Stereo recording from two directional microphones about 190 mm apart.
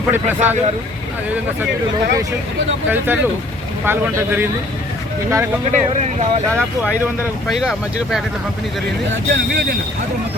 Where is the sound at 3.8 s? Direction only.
10° right (ahead or behind).